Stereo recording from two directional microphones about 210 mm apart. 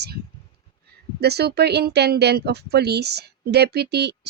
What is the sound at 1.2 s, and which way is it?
Speech, 50° right (ahead or behind).